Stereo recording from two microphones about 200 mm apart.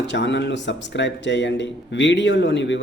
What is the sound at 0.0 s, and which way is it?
Speech, 60° left (ahead or behind).